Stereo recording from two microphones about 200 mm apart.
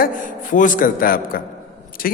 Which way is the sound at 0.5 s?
40° left (ahead or behind).